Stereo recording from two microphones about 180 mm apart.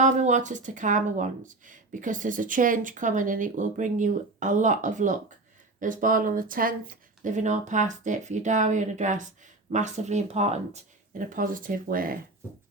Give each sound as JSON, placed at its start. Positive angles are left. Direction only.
{"t": 0.0, "sound": "speech", "side_deg": -45}
{"t": 11.3, "sound": "speech", "side_deg": -50}